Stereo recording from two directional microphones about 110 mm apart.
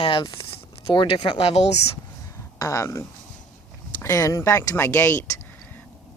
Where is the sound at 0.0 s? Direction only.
50° left (ahead or behind); by 1.8 s 70° left (ahead or behind).